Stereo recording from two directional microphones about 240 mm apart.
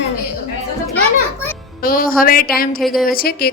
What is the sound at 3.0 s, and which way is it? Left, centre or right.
Speech, left.